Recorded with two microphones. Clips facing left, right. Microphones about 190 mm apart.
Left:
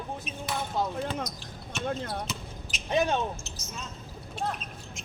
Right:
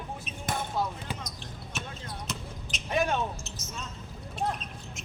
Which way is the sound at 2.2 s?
Centre (ahead or behind).